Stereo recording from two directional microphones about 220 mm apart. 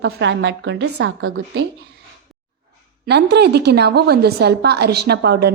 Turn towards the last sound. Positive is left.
turn(degrees=-45)  # may be behind; listen again after turning